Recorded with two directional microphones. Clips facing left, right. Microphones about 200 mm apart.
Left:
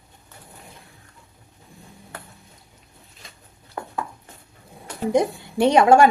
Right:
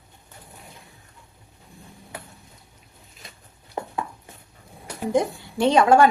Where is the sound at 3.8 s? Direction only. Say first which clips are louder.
Right 2 dB; 20° right (ahead or behind).